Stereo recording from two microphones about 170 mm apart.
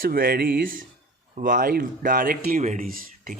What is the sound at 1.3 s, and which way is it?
Speech, 50° right (ahead or behind).